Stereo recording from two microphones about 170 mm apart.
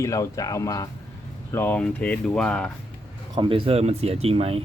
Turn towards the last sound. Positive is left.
turn(degrees=-35)  # may be behind; listen again after turning